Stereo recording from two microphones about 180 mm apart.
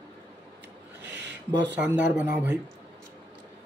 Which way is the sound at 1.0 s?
75° right (ahead or behind).